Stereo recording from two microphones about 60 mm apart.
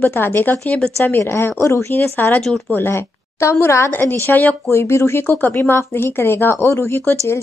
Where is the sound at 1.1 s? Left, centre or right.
Left.